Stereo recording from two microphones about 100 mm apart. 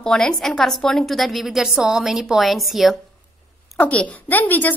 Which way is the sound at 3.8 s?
15° left (ahead or behind).